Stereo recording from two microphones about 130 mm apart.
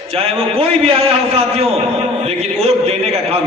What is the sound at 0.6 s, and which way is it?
Speech, 45° right (ahead or behind).